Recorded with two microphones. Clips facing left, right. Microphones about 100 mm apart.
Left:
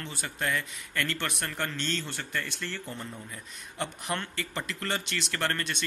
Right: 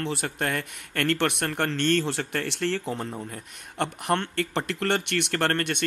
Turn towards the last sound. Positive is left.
turn(degrees=-60)  # may be behind; listen again after turning